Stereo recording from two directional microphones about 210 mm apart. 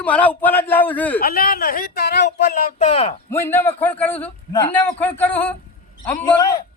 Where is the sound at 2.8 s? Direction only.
30° left (ahead or behind).